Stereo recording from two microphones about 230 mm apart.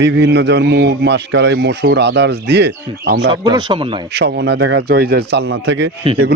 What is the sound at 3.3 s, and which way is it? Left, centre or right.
Speech, centre.